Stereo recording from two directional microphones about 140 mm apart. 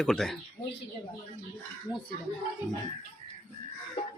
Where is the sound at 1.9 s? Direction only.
25° left (ahead or behind).